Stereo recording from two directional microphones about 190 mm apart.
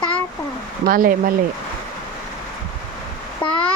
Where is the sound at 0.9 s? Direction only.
45° right (ahead or behind).